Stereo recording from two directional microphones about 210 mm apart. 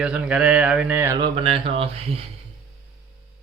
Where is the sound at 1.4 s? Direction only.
25° right (ahead or behind).